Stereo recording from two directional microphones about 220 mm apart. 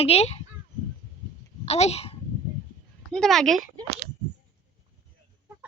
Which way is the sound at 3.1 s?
Centre (ahead or behind).